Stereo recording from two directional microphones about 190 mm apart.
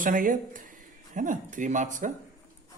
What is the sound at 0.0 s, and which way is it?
Speech, 45° right (ahead or behind).